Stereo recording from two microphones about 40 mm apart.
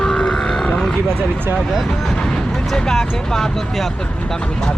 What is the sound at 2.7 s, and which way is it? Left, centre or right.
Speech, centre.